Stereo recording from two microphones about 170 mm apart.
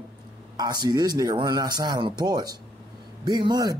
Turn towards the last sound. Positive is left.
turn(degrees=-25)  # may be behind; listen again after turning